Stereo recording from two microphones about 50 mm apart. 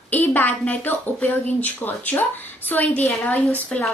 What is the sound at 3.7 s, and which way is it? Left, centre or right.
Speech, centre.